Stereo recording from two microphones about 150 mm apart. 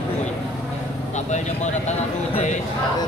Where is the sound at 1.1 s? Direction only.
50° left (ahead or behind).